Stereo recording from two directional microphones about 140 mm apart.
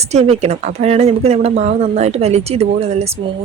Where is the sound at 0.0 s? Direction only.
50° right (ahead or behind).